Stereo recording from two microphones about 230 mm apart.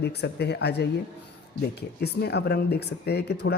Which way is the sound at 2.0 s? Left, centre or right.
Left.